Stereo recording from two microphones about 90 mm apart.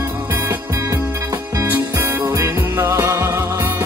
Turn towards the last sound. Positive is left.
turn(degrees=-30)  # may be behind; listen again after turning